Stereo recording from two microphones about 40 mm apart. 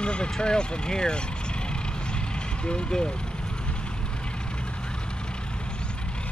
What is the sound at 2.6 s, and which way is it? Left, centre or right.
Speech, left.